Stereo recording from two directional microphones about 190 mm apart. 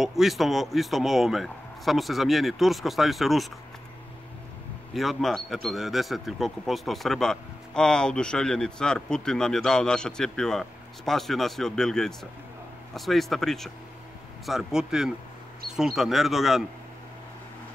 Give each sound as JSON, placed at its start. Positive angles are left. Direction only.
{"t": 0.0, "sound": "a man's voice", "side_deg": 0}
{"t": 4.9, "sound": "a man's voice", "side_deg": 0}